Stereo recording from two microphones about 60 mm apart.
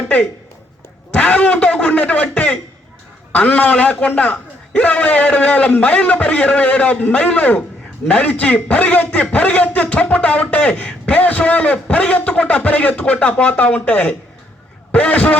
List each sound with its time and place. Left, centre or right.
1.1 s a man's voice: left